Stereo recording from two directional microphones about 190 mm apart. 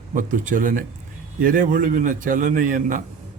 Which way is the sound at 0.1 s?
45° right (ahead or behind).